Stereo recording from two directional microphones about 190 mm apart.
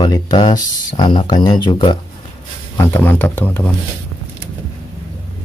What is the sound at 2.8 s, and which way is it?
Speech, 10° left (ahead or behind).